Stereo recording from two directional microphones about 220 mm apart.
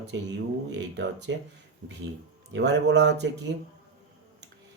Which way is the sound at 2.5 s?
50° right (ahead or behind).